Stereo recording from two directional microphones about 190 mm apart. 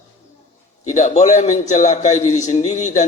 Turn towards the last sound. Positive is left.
turn(degrees=35)  # may be behind; listen again after turning